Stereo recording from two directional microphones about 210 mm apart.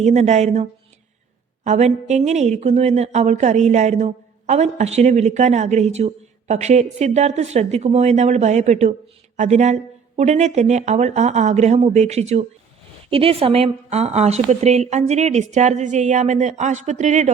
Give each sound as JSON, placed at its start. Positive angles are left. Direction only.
{"t": 0.0, "sound": "a woman's voice", "side_deg": -35}